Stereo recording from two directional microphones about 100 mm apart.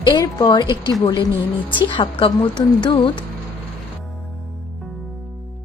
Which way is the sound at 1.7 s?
55° left (ahead or behind).